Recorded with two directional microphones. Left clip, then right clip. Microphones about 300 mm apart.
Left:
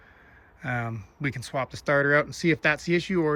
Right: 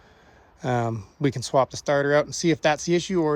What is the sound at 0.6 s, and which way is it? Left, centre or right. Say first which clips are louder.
Speech: right 6 dB; centre.